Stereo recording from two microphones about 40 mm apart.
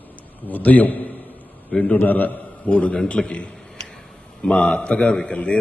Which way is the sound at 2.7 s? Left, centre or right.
Left.